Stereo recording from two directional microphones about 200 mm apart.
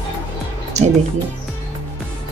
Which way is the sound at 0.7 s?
35° right (ahead or behind).